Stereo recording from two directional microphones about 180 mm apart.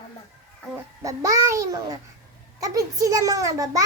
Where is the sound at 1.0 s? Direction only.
20° right (ahead or behind).